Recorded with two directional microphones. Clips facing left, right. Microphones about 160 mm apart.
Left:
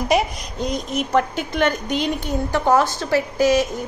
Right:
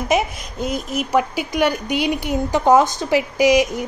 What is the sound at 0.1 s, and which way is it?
A woman's voice, 5° right (ahead or behind).